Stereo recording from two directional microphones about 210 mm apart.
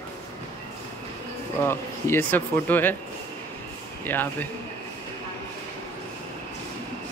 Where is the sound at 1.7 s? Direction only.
10° left (ahead or behind).